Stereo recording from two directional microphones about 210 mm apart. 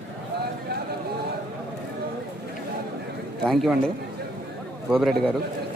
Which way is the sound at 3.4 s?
Centre (ahead or behind).